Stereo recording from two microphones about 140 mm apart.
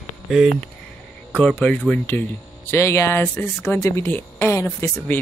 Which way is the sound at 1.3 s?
10° left (ahead or behind).